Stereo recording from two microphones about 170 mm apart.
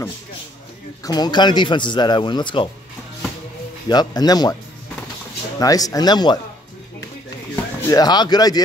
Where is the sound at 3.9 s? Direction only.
25° left (ahead or behind).